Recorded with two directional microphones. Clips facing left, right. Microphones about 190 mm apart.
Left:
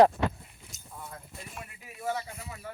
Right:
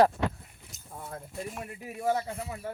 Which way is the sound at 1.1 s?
40° right (ahead or behind).